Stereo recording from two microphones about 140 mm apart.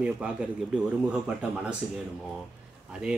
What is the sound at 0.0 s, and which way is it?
Speech, 10° right (ahead or behind).